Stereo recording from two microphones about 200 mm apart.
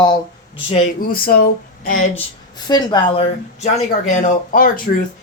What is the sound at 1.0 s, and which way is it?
Speech, 45° left (ahead or behind).